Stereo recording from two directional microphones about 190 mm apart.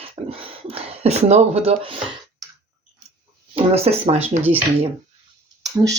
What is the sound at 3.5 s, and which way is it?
Speech, 30° right (ahead or behind).